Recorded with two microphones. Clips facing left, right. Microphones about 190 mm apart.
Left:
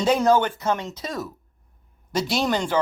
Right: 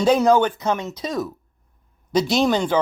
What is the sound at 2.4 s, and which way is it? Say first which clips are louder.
Speech: right 4 dB; 10° right (ahead or behind).